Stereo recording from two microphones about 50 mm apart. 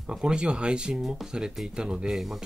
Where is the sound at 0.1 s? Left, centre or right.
Centre.